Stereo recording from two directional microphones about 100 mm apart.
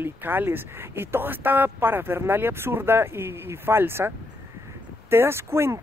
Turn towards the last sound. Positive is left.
turn(degrees=-25)  # may be behind; listen again after turning